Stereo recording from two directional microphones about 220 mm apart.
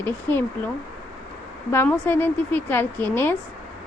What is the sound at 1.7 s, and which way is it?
Speech, 10° left (ahead or behind).